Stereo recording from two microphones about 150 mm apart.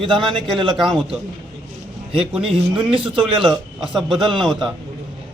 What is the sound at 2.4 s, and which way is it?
Speech, 35° right (ahead or behind).